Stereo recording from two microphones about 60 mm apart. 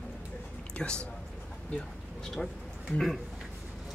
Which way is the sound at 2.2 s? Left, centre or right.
Centre.